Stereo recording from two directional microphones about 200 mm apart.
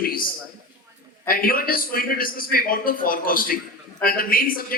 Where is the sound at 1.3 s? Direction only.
45° left (ahead or behind).